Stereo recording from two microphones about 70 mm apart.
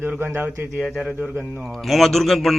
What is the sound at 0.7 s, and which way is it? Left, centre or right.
A man's voice, centre.